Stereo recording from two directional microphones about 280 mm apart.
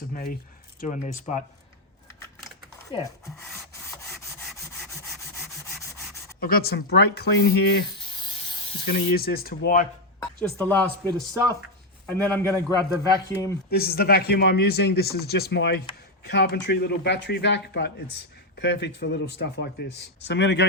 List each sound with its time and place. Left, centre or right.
0.1 s speech: left
2.9 s a man's voice: centre
6.4 s speech: left
7.9 s snake: centre
8.9 s speech: left
10.2 s speech: centre
12.1 s a man's voice: centre
13.7 s speech: left